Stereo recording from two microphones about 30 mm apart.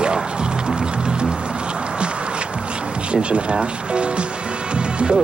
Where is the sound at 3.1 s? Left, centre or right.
Right.